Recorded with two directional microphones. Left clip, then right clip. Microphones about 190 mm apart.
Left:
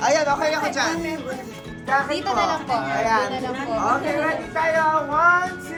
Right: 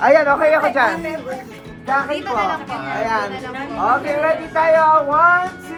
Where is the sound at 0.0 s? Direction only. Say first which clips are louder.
Right 7 dB; 35° right (ahead or behind).